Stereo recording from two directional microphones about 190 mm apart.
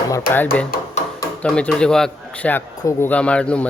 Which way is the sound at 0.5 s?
5° left (ahead or behind).